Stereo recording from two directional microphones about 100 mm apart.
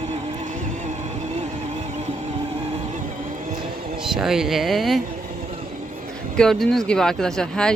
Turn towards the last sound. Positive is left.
turn(degrees=5)  # may be behind; listen again after turning